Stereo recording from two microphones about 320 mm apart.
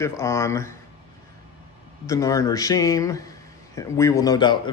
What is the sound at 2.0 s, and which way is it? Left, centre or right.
Speech, centre.